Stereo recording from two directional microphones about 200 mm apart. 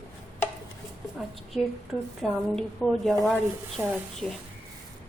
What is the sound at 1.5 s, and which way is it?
A woman's voice, centre (ahead or behind).